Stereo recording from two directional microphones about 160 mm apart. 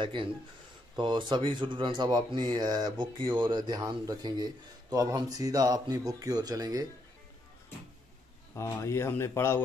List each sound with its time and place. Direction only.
0.0 s speech: 30° right (ahead or behind)
8.5 s speech: 15° left (ahead or behind)